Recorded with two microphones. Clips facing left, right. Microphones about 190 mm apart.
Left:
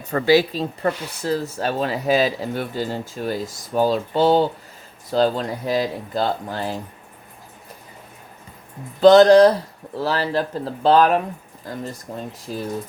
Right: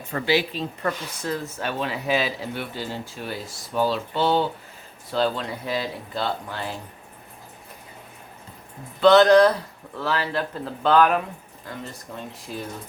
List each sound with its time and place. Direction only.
0.0 s speech: 40° left (ahead or behind)
9.0 s speech: 35° left (ahead or behind)